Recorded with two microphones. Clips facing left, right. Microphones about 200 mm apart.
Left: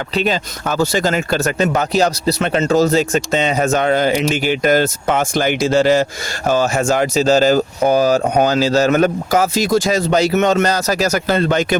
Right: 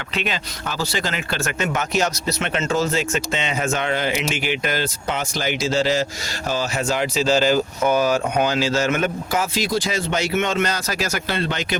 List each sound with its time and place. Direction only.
0.1 s speech: 35° left (ahead or behind)